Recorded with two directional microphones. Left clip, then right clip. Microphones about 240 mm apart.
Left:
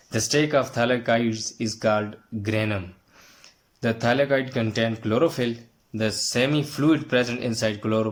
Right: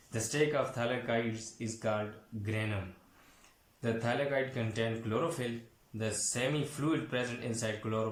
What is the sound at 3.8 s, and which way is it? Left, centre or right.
Speech, left.